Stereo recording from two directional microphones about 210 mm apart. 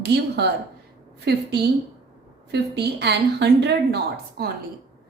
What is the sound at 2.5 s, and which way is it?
A woman's voice, 55° right (ahead or behind).